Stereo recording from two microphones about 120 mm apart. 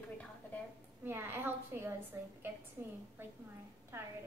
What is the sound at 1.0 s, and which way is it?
A woman's voice, 20° right (ahead or behind).